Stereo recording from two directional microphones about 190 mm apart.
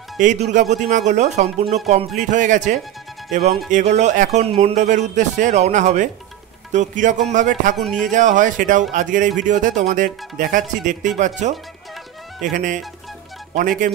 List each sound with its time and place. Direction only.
0.2 s a man's voice: 40° right (ahead or behind)
7.7 s speech: centre (ahead or behind)
8.0 s a man's voice: 40° right (ahead or behind)
12.5 s speech: 45° right (ahead or behind)